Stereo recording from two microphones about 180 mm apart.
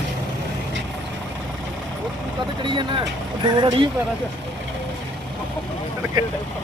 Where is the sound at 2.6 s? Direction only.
25° right (ahead or behind).